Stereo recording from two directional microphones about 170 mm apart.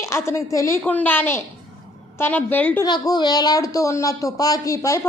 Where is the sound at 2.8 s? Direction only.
25° left (ahead or behind).